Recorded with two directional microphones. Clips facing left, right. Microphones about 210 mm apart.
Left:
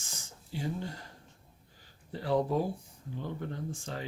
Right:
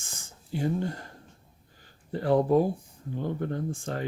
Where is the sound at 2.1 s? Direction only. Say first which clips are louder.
Right 6 dB; 55° right (ahead or behind).